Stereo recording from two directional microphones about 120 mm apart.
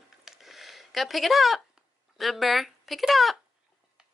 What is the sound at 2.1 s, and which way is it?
Speech, centre (ahead or behind).